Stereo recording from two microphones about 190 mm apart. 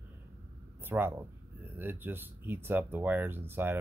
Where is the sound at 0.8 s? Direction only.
10° right (ahead or behind).